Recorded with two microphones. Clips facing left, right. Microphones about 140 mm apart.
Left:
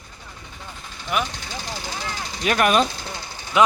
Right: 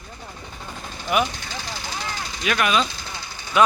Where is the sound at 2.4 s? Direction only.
45° left (ahead or behind).